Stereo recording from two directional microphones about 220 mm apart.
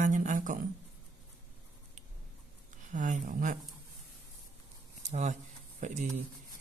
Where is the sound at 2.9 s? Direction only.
35° right (ahead or behind).